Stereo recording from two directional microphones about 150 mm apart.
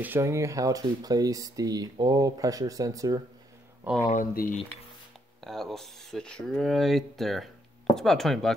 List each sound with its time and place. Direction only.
0.0 s speech: 15° right (ahead or behind)
3.8 s speech: centre (ahead or behind)
4.1 s speech: 70° left (ahead or behind)
5.4 s speech: centre (ahead or behind)